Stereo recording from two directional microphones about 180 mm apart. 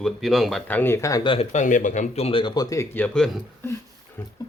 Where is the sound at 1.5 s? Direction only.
45° left (ahead or behind); by 3.4 s centre (ahead or behind).